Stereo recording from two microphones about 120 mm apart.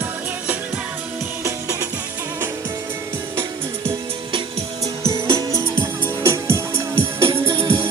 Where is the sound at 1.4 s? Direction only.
25° right (ahead or behind).